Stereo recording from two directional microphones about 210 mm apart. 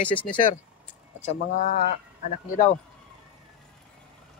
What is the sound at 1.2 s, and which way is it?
Speech, 40° left (ahead or behind).